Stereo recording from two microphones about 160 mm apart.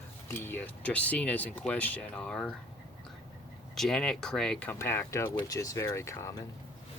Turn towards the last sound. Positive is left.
turn(degrees=15)  # may be behind; listen again after turning